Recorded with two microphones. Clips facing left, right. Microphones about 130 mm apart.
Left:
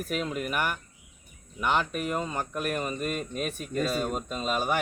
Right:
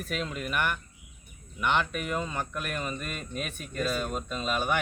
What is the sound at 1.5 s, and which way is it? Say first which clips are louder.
Speech: left 1 dB; 40° left (ahead or behind).